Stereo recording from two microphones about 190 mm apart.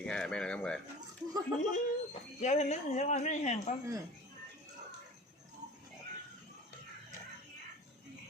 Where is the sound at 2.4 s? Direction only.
35° left (ahead or behind).